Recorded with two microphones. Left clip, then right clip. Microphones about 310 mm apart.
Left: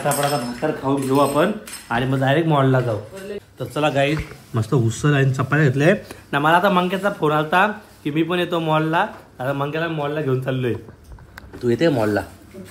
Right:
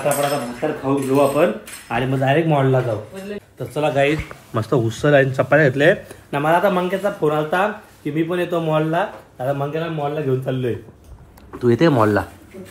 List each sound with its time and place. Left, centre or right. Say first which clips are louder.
0.0 s speech: right 1 dB; centre
4.0 s speech: right 2 dB; centre
5.9 s speech: right 2 dB; centre